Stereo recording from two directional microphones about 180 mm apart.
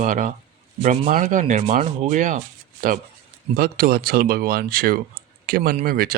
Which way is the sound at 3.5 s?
55° right (ahead or behind).